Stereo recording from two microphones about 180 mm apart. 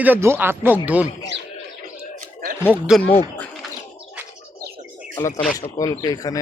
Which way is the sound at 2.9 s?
Centre (ahead or behind).